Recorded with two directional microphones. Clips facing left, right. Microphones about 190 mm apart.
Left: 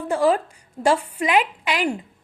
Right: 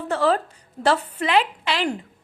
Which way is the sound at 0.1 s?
10° left (ahead or behind).